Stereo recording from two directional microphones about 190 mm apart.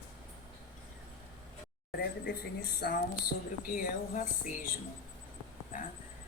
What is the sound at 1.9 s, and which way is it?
A woman's voice, 55° left (ahead or behind).